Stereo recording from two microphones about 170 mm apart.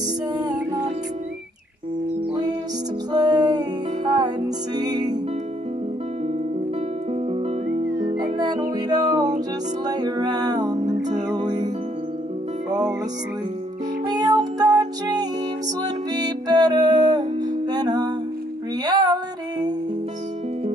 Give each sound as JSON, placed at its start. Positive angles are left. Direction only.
{"t": 0.3, "sound": "music", "side_deg": -25}
{"t": 3.1, "sound": "music", "side_deg": -25}
{"t": 7.1, "sound": "music", "side_deg": -35}
{"t": 8.0, "sound": "music", "side_deg": -20}
{"t": 14.0, "sound": "music", "side_deg": -25}